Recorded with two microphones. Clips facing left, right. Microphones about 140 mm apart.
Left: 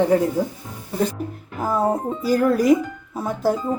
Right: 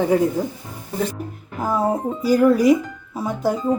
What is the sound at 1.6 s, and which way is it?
Speech, centre (ahead or behind).